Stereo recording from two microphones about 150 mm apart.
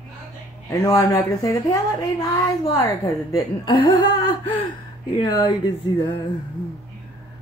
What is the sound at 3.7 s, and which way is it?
Speech, 35° left (ahead or behind).